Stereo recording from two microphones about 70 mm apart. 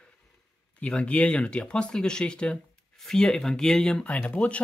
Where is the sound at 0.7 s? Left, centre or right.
Centre.